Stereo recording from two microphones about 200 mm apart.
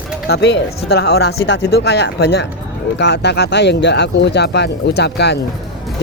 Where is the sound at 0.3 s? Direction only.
60° left (ahead or behind).